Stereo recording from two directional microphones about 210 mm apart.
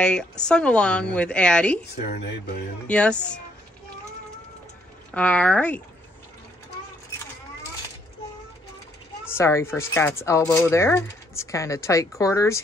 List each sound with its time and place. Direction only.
0.0 s speech: 5° left (ahead or behind)
2.0 s speech: 50° left (ahead or behind)
2.9 s speech: 5° left (ahead or behind)
5.1 s speech: 5° left (ahead or behind)
9.2 s speech: 10° left (ahead or behind)